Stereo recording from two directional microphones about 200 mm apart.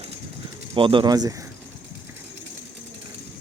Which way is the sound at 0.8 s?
25° right (ahead or behind).